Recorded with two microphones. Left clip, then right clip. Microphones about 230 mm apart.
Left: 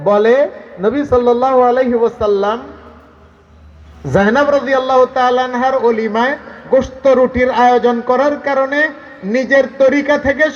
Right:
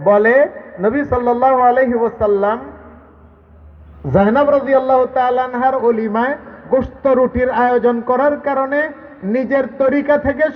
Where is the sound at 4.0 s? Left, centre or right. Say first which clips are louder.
Left 1 dB; right.